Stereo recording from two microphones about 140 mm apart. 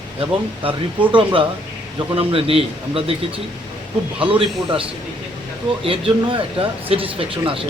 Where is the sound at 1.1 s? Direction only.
40° right (ahead or behind).